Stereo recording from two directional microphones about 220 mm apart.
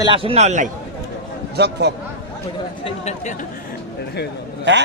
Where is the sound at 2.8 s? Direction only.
30° left (ahead or behind).